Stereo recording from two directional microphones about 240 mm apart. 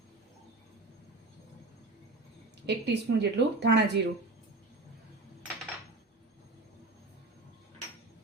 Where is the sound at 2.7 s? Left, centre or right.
Right.